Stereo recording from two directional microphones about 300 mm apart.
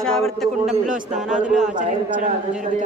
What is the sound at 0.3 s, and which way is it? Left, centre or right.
A woman's voice, centre.